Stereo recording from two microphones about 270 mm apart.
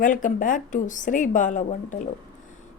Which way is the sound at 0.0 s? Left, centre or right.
Left.